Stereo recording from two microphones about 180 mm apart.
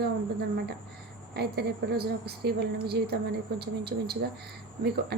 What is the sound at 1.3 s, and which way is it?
A woman's voice, 65° right (ahead or behind).